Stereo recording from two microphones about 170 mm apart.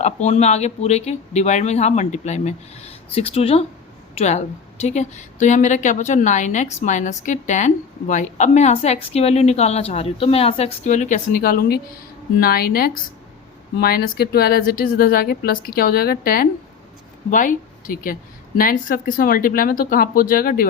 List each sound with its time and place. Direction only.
0.0 s a woman's voice: 40° left (ahead or behind); by 16.5 s 60° left (ahead or behind)
17.3 s a woman's voice: 50° left (ahead or behind)